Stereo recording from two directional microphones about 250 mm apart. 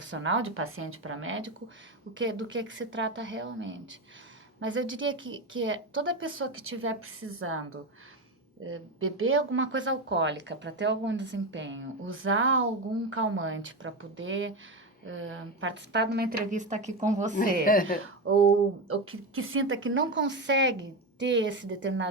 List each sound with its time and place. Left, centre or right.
0.0 s speech: right
8.6 s a woman's voice: right
17.3 s speech: left
18.3 s speech: right